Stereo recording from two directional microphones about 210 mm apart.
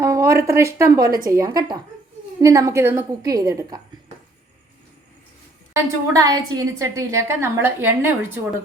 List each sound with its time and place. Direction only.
0.0 s a woman's voice: 15° right (ahead or behind)
5.7 s a woman's voice: 15° right (ahead or behind)